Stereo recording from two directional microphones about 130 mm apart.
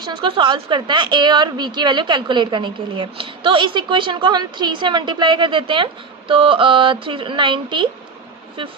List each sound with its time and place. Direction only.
0.0 s a woman's voice: 35° right (ahead or behind)